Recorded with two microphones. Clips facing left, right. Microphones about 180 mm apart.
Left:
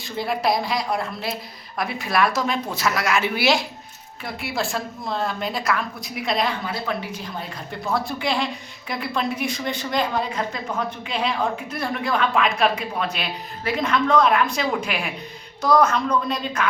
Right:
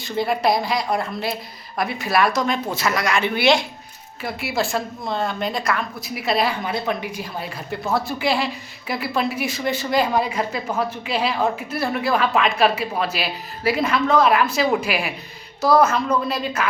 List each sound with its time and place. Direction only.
0.0 s speech: centre (ahead or behind)
6.7 s speech: 15° right (ahead or behind)